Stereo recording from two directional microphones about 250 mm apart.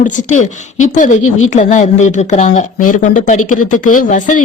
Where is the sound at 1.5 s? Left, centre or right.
Left.